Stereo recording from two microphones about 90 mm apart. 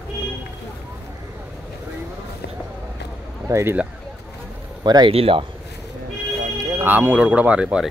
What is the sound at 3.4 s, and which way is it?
Speech, 30° right (ahead or behind).